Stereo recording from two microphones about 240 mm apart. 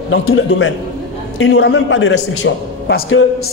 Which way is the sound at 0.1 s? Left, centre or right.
Left.